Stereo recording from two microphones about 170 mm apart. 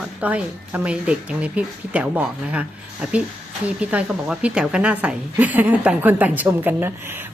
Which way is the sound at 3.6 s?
5° right (ahead or behind).